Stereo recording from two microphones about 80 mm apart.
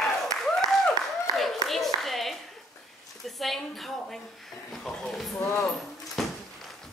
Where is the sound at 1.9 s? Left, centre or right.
Centre.